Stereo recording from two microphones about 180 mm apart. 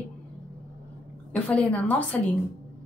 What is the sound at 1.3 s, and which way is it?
Speech, 5° left (ahead or behind).